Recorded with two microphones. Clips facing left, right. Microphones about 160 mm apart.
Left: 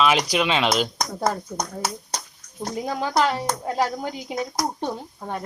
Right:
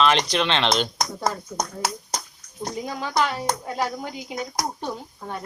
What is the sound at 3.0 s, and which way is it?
Speech, 35° left (ahead or behind).